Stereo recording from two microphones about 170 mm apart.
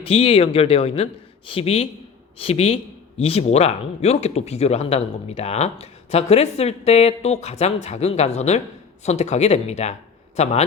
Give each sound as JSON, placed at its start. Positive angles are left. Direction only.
{"t": 0.0, "sound": "a man's voice", "side_deg": 35}